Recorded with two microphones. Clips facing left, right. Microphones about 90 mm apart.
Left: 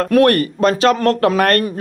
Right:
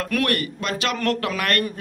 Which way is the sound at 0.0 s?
40° left (ahead or behind).